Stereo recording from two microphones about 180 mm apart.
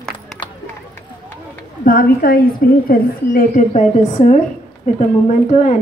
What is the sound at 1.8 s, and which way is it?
A woman's voice, 50° left (ahead or behind).